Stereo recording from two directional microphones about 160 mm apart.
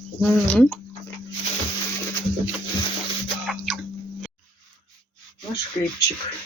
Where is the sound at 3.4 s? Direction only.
Centre (ahead or behind).